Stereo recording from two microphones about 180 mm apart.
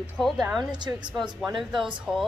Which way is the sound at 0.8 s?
25° right (ahead or behind).